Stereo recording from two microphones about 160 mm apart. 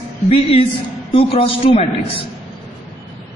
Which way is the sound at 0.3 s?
35° left (ahead or behind).